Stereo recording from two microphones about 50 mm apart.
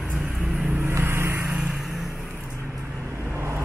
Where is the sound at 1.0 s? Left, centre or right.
Right.